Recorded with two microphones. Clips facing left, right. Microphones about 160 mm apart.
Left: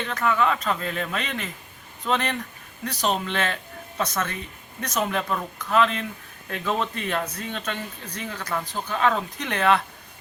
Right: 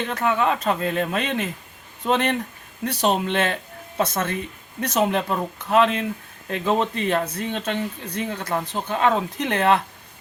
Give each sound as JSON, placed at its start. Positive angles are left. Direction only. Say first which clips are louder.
{"t": 0.1, "sound": "speech", "louder": "even", "side_deg": -30}
{"t": 6.5, "sound": "speech", "louder": "right 5 dB", "side_deg": -20}